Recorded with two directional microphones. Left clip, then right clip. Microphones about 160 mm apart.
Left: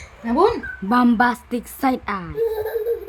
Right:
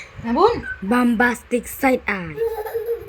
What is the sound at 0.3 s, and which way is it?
Speech, 15° left (ahead or behind).